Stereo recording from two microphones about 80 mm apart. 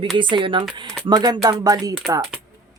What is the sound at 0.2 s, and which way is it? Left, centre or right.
Speech, right.